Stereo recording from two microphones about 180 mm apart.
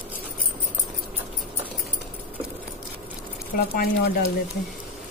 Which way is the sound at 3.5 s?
60° left (ahead or behind).